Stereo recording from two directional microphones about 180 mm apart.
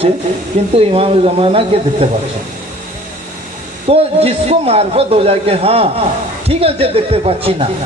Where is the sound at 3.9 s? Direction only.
35° right (ahead or behind).